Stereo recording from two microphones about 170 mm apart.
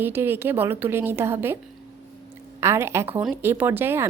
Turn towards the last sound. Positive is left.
turn(degrees=-15)  # may be behind; listen again after turning